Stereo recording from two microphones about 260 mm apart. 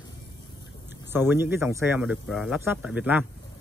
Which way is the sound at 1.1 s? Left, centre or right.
Centre.